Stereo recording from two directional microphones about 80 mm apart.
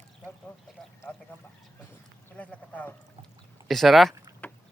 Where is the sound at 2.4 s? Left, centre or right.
Centre.